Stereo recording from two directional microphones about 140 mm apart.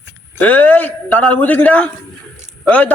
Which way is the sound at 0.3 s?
10° left (ahead or behind).